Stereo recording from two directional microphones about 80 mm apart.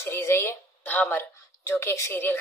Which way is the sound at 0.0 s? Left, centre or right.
Left.